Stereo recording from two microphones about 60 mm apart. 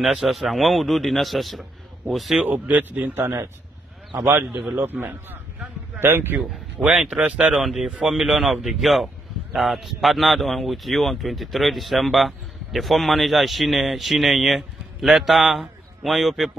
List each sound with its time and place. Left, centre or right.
0.0 s speech: centre
2.5 s a man's voice: right
4.8 s a man's voice: right
6.8 s a man's voice: centre
7.5 s speech: centre
7.8 s a man's voice: centre
8.1 s speech: centre